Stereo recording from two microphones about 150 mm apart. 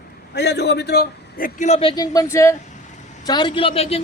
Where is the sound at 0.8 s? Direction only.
90° left; by 1.6 s 70° left (ahead or behind).